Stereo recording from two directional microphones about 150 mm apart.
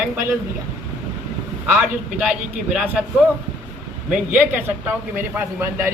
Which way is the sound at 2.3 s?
5° right (ahead or behind).